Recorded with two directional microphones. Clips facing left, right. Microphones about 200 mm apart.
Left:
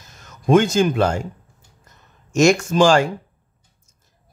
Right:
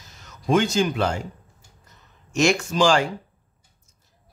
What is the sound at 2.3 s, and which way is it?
Speech, 45° left (ahead or behind).